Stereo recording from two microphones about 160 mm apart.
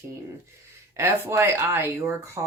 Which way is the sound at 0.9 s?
15° right (ahead or behind).